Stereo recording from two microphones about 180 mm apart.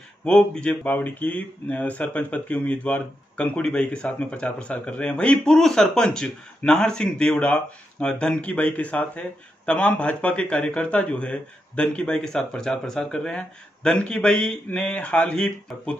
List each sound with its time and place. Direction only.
0.2 s a man's voice: 5° left (ahead or behind)